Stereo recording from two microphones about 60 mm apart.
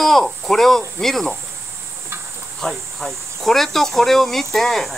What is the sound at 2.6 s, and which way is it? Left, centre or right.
Speech, centre.